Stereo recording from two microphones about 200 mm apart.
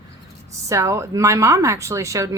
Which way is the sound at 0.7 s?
15° right (ahead or behind).